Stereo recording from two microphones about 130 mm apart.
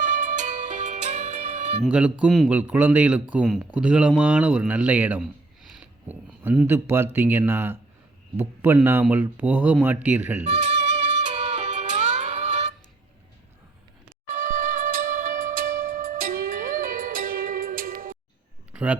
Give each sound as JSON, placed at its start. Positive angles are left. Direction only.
{"t": 0.0, "sound": "music", "side_deg": -75}
{"t": 1.8, "sound": "speech", "side_deg": -10}
{"t": 5.7, "sound": "a sound", "side_deg": -10}
{"t": 6.7, "sound": "speech", "side_deg": -15}
{"t": 10.4, "sound": "music", "side_deg": -55}
{"t": 14.3, "sound": "music", "side_deg": -90}
{"t": 18.7, "sound": "a sound", "side_deg": -10}